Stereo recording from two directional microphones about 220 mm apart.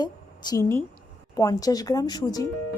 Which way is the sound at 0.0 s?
15° left (ahead or behind).